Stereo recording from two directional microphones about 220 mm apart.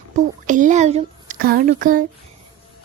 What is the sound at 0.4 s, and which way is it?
Speech, 35° right (ahead or behind).